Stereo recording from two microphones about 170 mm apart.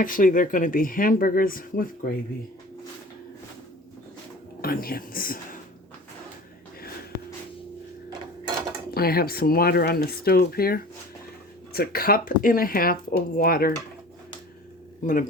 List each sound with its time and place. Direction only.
0.0 s speech: 50° left (ahead or behind)
4.6 s speech: 60° left (ahead or behind)
8.9 s speech: 65° left (ahead or behind)
15.0 s a man's voice: 50° left (ahead or behind)